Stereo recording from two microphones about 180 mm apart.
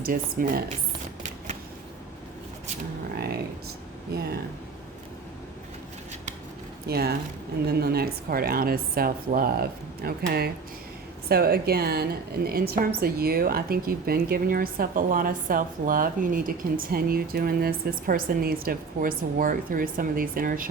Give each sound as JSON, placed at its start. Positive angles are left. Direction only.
{"t": 0.0, "sound": "speech", "side_deg": -55}
{"t": 3.2, "sound": "a sound", "side_deg": -55}
{"t": 4.1, "sound": "speech", "side_deg": -60}
{"t": 6.8, "sound": "speech", "side_deg": -60}